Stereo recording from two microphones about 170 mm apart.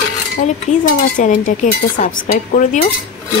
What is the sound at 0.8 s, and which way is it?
Speech, 50° left (ahead or behind).